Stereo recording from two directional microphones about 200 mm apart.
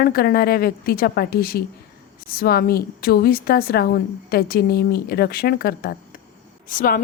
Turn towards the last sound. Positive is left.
turn(degrees=45)  # may be behind; listen again after turning